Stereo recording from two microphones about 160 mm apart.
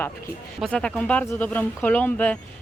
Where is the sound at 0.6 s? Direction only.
5° left (ahead or behind).